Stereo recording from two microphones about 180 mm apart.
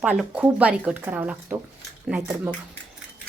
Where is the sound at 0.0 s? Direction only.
5° right (ahead or behind).